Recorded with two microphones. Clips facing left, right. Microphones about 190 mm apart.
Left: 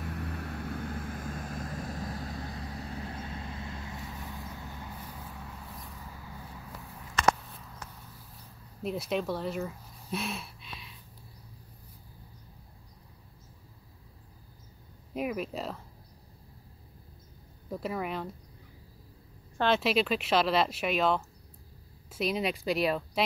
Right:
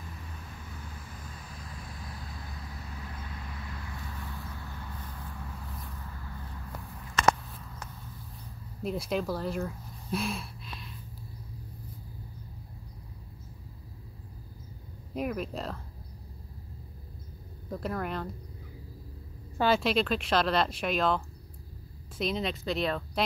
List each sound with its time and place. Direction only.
0.0 s vehicle: 75° left (ahead or behind); by 5.0 s 15° left (ahead or behind)
5.7 s vehicle: centre (ahead or behind)
7.3 s a sound: centre (ahead or behind)
8.8 s speech: centre (ahead or behind)
15.1 s speech: 5° left (ahead or behind)
17.6 s speech: 5° left (ahead or behind)
19.6 s speech: centre (ahead or behind)